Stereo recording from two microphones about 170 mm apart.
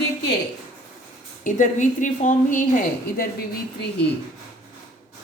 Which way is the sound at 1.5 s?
50° left (ahead or behind).